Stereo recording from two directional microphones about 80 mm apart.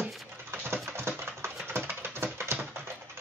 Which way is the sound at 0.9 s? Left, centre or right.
Right.